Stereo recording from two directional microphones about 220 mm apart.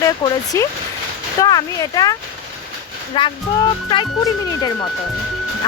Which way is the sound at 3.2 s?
20° left (ahead or behind).